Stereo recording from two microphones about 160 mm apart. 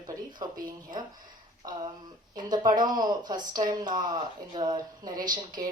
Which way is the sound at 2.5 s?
25° right (ahead or behind).